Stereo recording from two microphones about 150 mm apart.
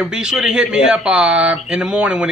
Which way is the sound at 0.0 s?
5° right (ahead or behind).